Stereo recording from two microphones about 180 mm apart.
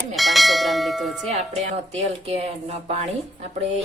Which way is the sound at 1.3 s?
35° right (ahead or behind).